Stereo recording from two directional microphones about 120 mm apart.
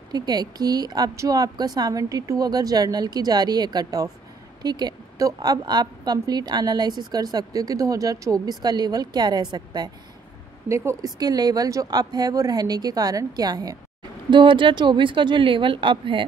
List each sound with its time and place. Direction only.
0.1 s a woman's voice: 35° right (ahead or behind)
10.7 s speech: 25° right (ahead or behind)
11.1 s a woman's voice: 35° right (ahead or behind)